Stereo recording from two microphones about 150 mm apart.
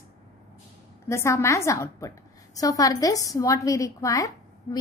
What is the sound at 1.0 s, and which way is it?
A woman's voice, 20° left (ahead or behind).